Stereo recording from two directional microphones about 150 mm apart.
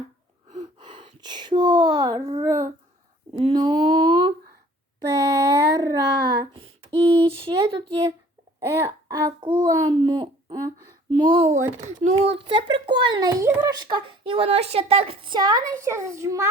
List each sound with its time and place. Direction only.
0.8 s speech: 35° right (ahead or behind)
3.4 s a sound: 30° right (ahead or behind)
5.1 s child singing: 25° right (ahead or behind)
7.1 s speech: 40° right (ahead or behind)
8.7 s a woman's voice: 20° right (ahead or behind)
11.5 s a child's voice: 55° right (ahead or behind); by 16.5 s 20° right (ahead or behind)